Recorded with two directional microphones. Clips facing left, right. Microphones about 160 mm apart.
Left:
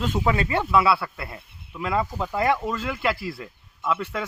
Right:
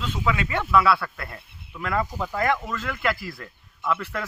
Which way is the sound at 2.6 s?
30° left (ahead or behind).